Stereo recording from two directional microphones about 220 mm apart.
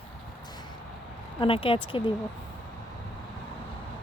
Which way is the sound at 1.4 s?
25° left (ahead or behind).